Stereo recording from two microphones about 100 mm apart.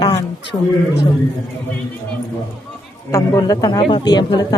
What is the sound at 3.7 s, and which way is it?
Speech, 50° left (ahead or behind).